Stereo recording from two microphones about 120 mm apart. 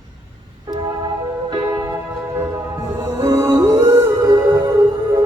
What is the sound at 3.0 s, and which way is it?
Music, 30° right (ahead or behind).